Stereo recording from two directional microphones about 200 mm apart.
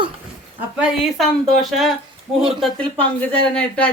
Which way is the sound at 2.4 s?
Centre (ahead or behind).